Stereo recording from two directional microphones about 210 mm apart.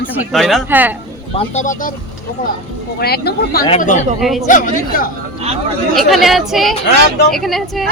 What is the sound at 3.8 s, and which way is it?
Speech, 35° left (ahead or behind).